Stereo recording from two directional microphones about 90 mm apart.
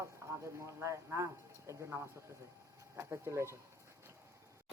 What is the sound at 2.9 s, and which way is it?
Speech, 30° right (ahead or behind).